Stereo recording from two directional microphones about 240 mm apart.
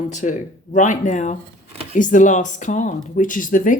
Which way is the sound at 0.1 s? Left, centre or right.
Left.